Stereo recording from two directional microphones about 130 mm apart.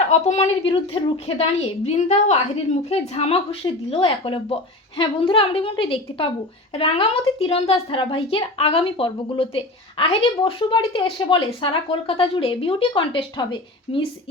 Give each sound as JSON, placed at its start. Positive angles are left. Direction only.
{"t": 0.1, "sound": "a woman's voice", "side_deg": 55}